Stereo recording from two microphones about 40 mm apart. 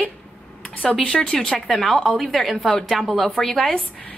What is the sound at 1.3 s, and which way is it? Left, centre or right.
A woman's voice, centre.